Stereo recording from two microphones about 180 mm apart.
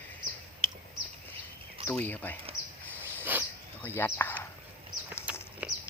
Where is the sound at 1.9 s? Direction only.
10° left (ahead or behind).